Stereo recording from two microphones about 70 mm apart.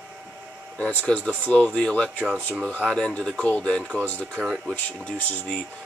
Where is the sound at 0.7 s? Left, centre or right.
Centre.